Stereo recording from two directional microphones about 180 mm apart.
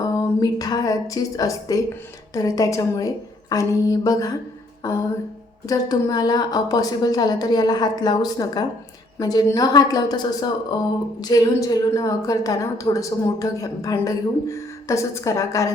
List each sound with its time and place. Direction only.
0.0 s a woman's voice: 20° left (ahead or behind)
4.8 s a sound: 20° left (ahead or behind)
5.6 s a woman's voice: 20° left (ahead or behind)